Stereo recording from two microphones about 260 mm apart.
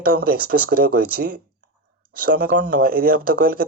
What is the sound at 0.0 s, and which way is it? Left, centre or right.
Speech, right.